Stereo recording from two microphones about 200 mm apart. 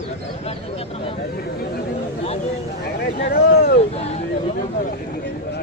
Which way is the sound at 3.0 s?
50° left (ahead or behind).